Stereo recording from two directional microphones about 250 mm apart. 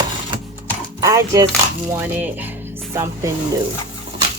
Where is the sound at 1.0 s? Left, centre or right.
Centre.